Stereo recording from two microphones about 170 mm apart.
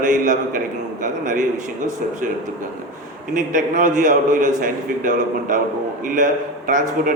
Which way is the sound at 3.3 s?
50° right (ahead or behind).